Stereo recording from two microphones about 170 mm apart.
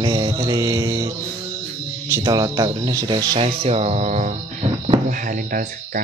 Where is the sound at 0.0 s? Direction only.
25° right (ahead or behind).